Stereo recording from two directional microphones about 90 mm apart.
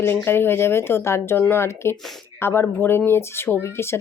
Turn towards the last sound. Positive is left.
turn(degrees=30)  # may be behind; listen again after turning